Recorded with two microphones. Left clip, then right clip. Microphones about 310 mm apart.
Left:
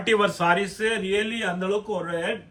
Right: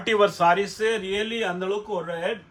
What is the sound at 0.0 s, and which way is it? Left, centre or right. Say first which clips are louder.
Speech: right 2 dB; right.